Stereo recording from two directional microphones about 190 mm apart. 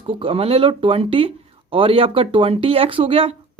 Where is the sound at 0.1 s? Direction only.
30° right (ahead or behind).